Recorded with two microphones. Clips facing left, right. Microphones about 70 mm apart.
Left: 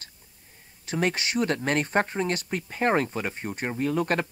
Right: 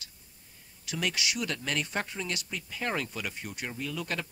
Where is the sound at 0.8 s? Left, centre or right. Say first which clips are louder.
Left 6 dB; left.